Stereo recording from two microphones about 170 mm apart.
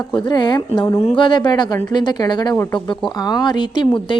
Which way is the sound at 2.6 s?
15° left (ahead or behind).